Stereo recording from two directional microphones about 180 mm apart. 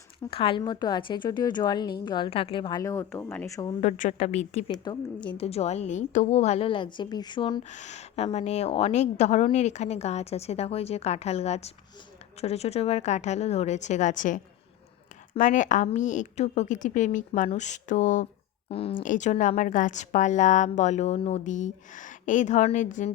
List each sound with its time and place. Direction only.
0.3 s a woman's voice: 30° left (ahead or behind)
3.8 s a woman's voice: 45° left (ahead or behind)
4.7 s a woman's voice: 25° left (ahead or behind)
7.7 s a woman's voice: 40° left (ahead or behind)
18.7 s a woman's voice: 30° left (ahead or behind)
19.0 s a woman's voice: 45° left (ahead or behind)